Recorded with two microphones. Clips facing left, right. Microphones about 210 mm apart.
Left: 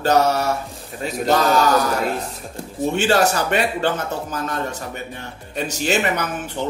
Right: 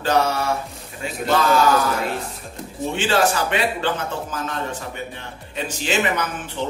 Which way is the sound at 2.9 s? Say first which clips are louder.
Left 2 dB; 45° left (ahead or behind).